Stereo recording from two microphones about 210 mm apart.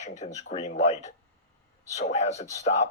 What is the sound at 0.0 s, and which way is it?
Speech, 35° left (ahead or behind).